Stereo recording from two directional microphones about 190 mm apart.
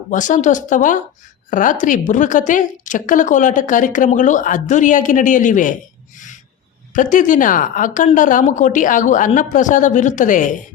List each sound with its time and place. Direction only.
0.1 s a woman's voice: 40° left (ahead or behind)
6.9 s a woman's voice: 40° left (ahead or behind)